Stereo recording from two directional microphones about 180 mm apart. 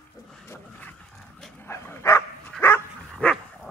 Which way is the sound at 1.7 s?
15° left (ahead or behind).